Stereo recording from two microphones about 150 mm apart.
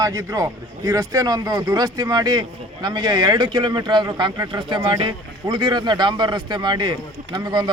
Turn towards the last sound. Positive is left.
turn(degrees=-30)  # may be behind; listen again after turning